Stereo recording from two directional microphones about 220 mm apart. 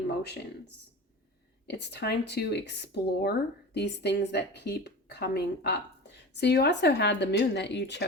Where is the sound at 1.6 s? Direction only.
50° left (ahead or behind).